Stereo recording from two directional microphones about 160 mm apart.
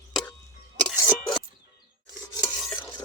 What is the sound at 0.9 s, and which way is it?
Music, 5° right (ahead or behind).